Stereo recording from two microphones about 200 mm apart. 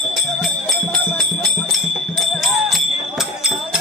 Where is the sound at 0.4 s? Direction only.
Centre (ahead or behind).